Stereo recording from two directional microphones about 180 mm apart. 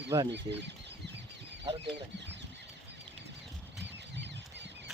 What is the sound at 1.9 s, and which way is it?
Speech, 75° right (ahead or behind).